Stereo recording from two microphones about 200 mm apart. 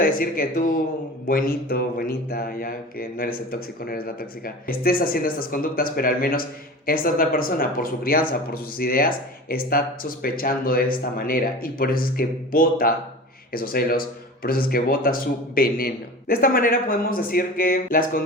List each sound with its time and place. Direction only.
0.0 s speech: 45° left (ahead or behind)